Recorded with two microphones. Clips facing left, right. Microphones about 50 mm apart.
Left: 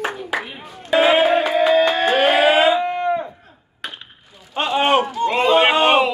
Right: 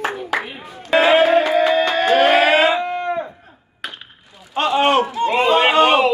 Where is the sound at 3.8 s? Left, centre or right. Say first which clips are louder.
Right 1 dB; centre.